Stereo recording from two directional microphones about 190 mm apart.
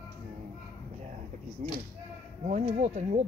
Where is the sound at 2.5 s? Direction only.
35° right (ahead or behind).